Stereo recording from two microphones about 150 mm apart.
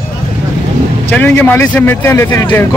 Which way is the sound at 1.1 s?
10° left (ahead or behind).